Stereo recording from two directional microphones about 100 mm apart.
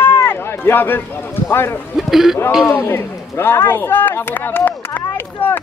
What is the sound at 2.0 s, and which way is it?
Speech, 5° right (ahead or behind).